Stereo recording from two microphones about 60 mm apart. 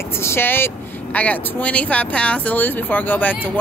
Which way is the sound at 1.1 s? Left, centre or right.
Left.